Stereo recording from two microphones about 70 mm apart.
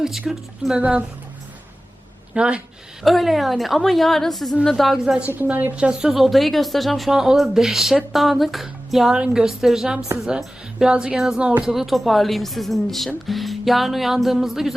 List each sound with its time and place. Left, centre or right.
0.0 s a woman's voice: centre
0.8 s speech: centre
2.3 s speech: centre
3.0 s a woman's voice: centre
5.3 s a woman's voice: right
11.7 s a woman's voice: centre